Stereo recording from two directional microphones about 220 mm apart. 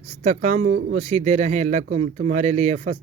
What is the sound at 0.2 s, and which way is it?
Speech, 30° right (ahead or behind).